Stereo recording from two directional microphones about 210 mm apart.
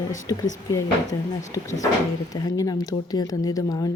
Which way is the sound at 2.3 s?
15° left (ahead or behind).